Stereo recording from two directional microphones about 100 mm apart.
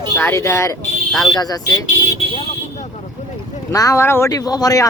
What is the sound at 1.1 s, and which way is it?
Speech, 5° left (ahead or behind).